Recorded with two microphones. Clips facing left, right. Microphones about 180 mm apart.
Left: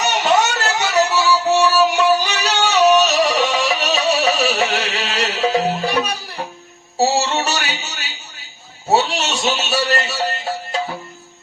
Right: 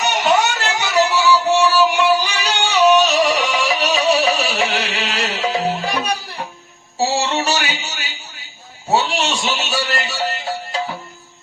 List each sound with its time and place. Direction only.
0.0 s music: 40° left (ahead or behind)
7.0 s music: 40° left (ahead or behind)